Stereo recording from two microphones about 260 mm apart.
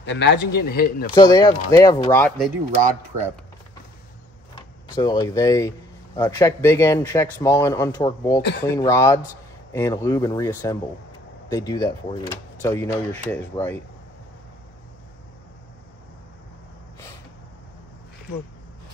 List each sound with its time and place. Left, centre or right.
0.0 s speech: left
1.1 s speech: centre
4.9 s speech: centre